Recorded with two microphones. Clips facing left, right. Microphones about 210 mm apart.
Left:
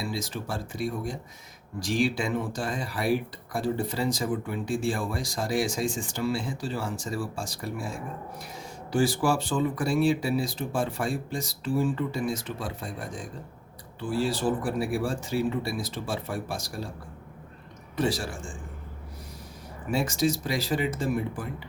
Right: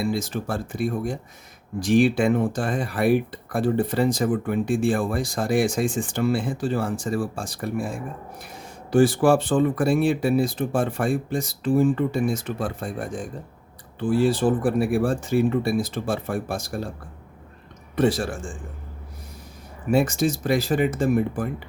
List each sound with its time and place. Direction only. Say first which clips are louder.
0.0 s speech: right 7 dB; 55° right (ahead or behind)
17.9 s speech: right 6 dB; 55° right (ahead or behind)
19.9 s speech: right 5 dB; 55° right (ahead or behind)